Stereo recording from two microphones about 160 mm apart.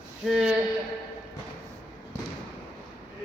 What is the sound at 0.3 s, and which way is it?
Speech, 5° right (ahead or behind).